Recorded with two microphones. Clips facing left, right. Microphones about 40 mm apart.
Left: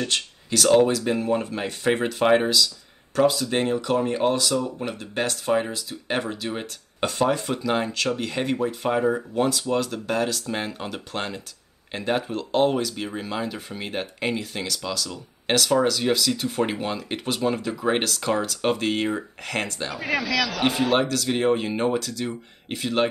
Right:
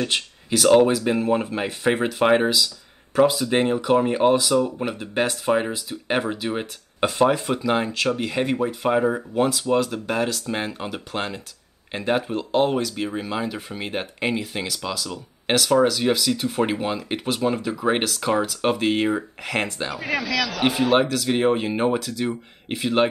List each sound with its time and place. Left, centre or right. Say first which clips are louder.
0.0 s speech: right 2 dB; centre
19.9 s speech: even; centre